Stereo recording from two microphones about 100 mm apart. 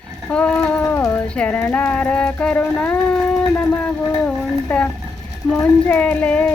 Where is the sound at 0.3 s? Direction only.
10° left (ahead or behind).